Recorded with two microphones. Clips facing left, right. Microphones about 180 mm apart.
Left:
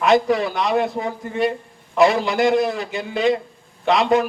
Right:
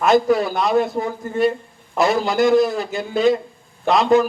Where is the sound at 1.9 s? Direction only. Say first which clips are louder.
Left 1 dB; 45° right (ahead or behind).